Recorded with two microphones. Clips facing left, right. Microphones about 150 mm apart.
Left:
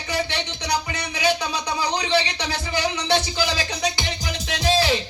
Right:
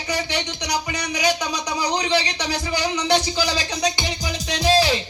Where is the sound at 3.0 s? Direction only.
15° right (ahead or behind).